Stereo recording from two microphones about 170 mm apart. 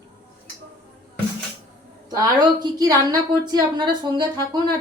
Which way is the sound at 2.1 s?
25° right (ahead or behind).